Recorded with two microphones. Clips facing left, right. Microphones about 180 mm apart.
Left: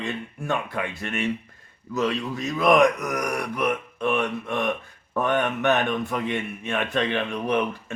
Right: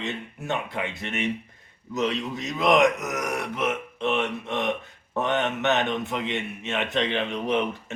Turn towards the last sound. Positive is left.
turn(degrees=-20)  # may be behind; listen again after turning